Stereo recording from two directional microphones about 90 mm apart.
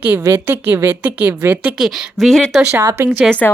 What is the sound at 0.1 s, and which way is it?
Speech, 20° right (ahead or behind).